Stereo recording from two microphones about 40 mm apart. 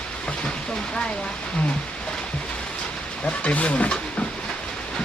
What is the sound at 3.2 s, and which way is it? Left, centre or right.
Speech, left.